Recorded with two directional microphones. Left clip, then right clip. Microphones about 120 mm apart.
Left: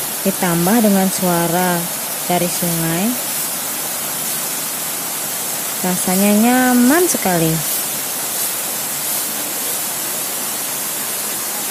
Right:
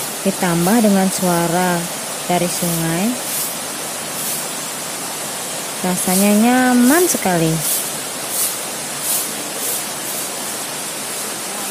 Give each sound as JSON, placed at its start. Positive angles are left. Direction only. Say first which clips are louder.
{"t": 0.4, "sound": "speech", "louder": "even", "side_deg": 0}
{"t": 5.9, "sound": "speech", "louder": "even", "side_deg": 0}